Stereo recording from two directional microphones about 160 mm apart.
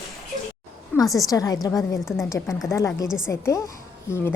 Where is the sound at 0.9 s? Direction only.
10° left (ahead or behind).